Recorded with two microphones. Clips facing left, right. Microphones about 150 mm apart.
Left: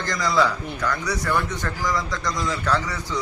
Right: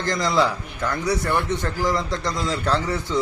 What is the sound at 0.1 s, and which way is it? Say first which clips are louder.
A man's voice: right 1 dB; 25° right (ahead or behind).